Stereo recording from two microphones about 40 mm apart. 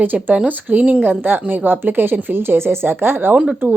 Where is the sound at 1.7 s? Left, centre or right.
Right.